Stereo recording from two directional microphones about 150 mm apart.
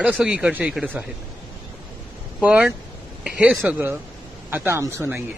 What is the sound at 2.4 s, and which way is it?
Speech, 10° right (ahead or behind).